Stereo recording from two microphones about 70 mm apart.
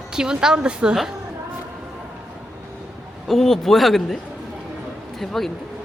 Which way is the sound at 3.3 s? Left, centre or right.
Centre.